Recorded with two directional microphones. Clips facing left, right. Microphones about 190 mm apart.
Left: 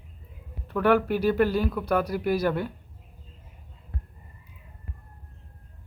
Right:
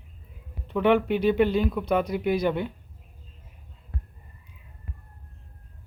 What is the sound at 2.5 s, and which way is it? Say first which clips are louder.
Speech: right 1 dB; 20° right (ahead or behind).